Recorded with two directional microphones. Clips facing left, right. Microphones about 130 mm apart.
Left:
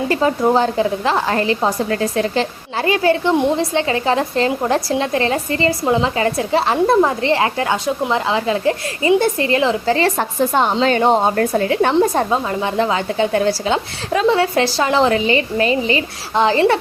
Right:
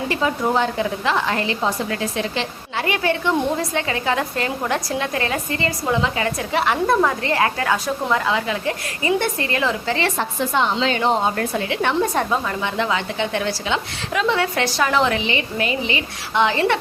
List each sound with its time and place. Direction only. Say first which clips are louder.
0.1 s a woman's voice: left 5 dB; 40° left (ahead or behind)